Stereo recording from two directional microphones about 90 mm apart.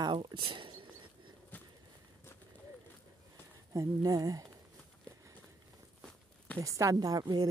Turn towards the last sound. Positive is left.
turn(degrees=-45)  # may be behind; listen again after turning